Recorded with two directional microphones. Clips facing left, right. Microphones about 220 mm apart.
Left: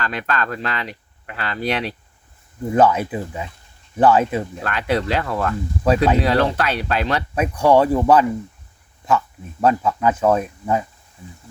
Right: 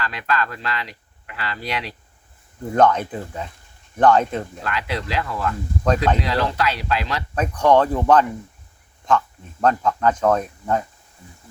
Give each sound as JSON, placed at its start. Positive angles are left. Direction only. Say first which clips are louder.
{"t": 0.0, "sound": "speech", "louder": "left 1 dB", "side_deg": 50}
{"t": 2.7, "sound": "speech", "louder": "left 1 dB", "side_deg": 5}
{"t": 4.6, "sound": "speech", "louder": "left 5 dB", "side_deg": 50}
{"t": 5.8, "sound": "speech", "louder": "left 3 dB", "side_deg": 5}
{"t": 6.2, "sound": "speech", "louder": "left 4 dB", "side_deg": 50}
{"t": 7.3, "sound": "speech", "louder": "left 1 dB", "side_deg": 10}